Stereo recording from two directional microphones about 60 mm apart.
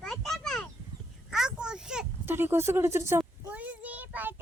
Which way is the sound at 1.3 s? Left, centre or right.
Centre.